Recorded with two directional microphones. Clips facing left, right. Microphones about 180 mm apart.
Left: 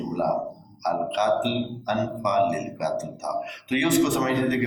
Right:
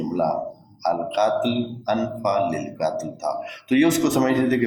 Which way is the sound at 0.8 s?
45° right (ahead or behind).